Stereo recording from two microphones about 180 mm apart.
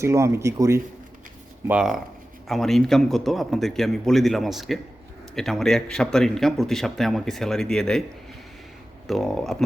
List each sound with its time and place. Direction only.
0.0 s speech: 15° right (ahead or behind)
1.6 s speech: 5° right (ahead or behind)
9.0 s speech: centre (ahead or behind)